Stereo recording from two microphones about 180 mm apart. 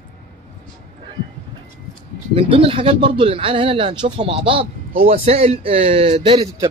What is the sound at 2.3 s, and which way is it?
A man's voice, 30° right (ahead or behind).